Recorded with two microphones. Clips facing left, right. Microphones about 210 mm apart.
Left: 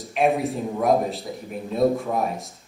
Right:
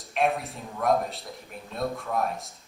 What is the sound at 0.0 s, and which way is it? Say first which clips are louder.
Speech: left 6 dB; centre (ahead or behind).